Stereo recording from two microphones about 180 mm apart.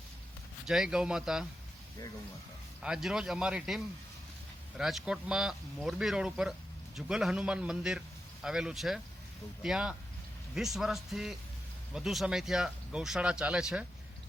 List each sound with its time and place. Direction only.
0.6 s speech: 5° right (ahead or behind)
2.8 s a man's voice: 5° right (ahead or behind)